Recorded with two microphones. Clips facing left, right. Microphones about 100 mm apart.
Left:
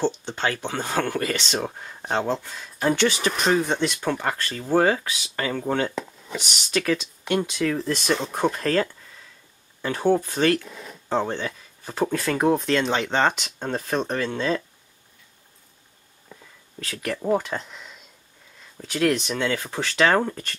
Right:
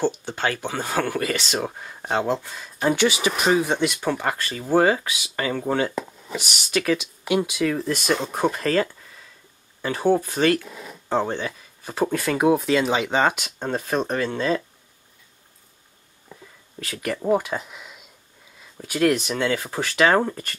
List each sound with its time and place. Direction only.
0.0 s speech: 10° right (ahead or behind)
16.8 s speech: 5° right (ahead or behind)